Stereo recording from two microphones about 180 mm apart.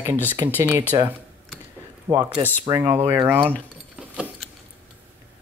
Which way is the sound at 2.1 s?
10° right (ahead or behind).